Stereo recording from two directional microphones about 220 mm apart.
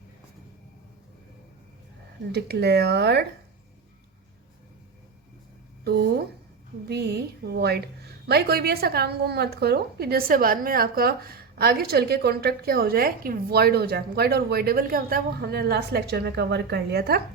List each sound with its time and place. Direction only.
2.3 s a woman's voice: 50° right (ahead or behind)
5.8 s a woman's voice: 45° right (ahead or behind)